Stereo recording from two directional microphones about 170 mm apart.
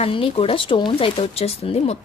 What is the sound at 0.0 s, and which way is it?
Speech, 35° left (ahead or behind).